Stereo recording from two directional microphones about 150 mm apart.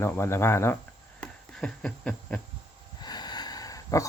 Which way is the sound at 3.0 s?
30° left (ahead or behind).